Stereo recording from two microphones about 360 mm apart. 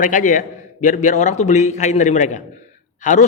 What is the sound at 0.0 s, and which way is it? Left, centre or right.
A man's voice, left.